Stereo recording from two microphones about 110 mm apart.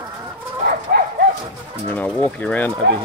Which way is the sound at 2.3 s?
10° left (ahead or behind).